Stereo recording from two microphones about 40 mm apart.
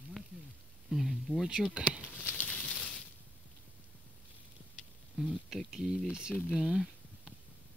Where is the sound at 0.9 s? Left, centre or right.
Centre.